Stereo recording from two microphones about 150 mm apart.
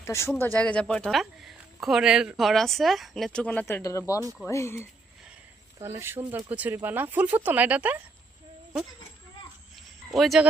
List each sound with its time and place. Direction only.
0.0 s speech: 20° left (ahead or behind)
5.8 s speech: 15° right (ahead or behind)
10.2 s speech: centre (ahead or behind)